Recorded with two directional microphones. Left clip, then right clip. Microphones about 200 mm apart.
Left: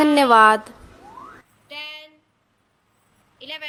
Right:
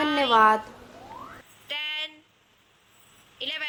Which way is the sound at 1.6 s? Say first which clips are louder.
Right 3 dB; centre (ahead or behind).